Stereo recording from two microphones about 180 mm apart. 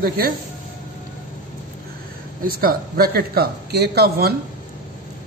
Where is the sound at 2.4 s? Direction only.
55° right (ahead or behind).